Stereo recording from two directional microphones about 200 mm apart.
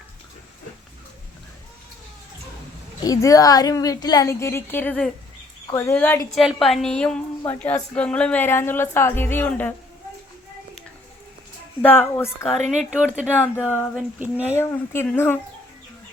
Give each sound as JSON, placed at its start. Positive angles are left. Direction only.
{"t": 3.0, "sound": "a woman's voice", "side_deg": 15}
{"t": 11.8, "sound": "a woman's voice", "side_deg": 10}
{"t": 12.8, "sound": "speech", "side_deg": -5}
{"t": 14.5, "sound": "a woman's voice", "side_deg": 10}